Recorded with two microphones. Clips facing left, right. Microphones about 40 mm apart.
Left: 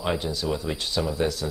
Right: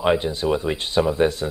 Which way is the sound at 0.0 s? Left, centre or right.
Right.